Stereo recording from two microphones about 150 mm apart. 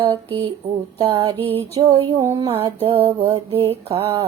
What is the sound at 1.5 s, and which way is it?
Mantra, 40° right (ahead or behind).